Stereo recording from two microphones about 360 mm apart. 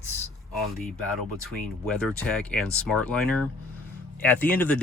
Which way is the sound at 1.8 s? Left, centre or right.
Centre.